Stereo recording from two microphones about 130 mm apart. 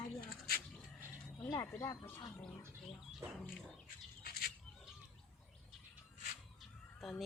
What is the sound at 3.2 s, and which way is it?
Bird, 20° right (ahead or behind).